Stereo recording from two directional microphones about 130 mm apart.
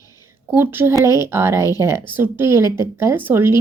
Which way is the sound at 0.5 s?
15° right (ahead or behind).